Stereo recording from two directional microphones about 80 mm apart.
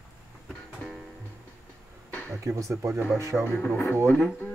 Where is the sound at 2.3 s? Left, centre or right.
Right.